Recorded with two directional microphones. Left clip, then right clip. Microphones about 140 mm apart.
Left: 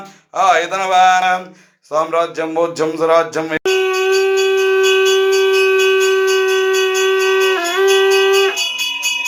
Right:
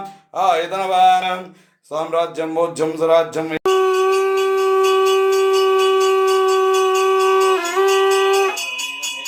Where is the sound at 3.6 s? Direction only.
25° right (ahead or behind).